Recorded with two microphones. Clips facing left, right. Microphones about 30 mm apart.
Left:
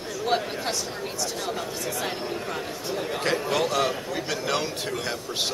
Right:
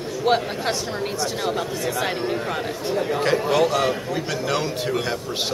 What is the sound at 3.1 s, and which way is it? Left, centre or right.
A man's voice, centre.